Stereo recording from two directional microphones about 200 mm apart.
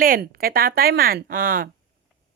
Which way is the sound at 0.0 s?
45° right (ahead or behind).